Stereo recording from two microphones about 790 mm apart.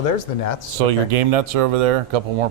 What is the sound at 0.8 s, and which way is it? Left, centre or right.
Speech, right.